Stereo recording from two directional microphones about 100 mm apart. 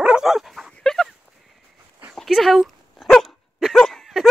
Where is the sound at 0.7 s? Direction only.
5° left (ahead or behind).